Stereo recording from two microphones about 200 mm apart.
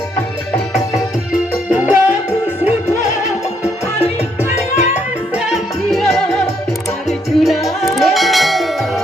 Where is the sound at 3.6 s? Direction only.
30° left (ahead or behind).